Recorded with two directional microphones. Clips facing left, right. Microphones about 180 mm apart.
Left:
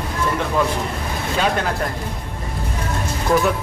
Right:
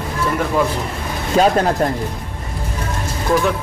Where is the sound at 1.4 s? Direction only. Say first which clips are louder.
Right 7 dB; 40° right (ahead or behind).